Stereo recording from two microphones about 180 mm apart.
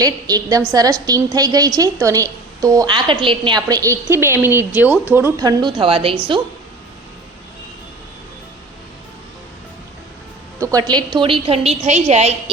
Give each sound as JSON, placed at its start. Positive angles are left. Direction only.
{"t": 0.0, "sound": "a woman's voice", "side_deg": -20}
{"t": 10.6, "sound": "a woman's voice", "side_deg": -20}